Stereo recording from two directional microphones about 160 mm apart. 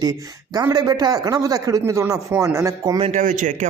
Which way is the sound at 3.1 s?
50° right (ahead or behind).